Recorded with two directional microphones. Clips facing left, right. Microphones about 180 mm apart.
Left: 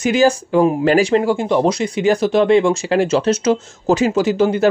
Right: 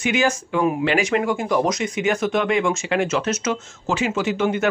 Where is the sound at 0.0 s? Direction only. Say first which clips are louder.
Left 7 dB; 35° left (ahead or behind).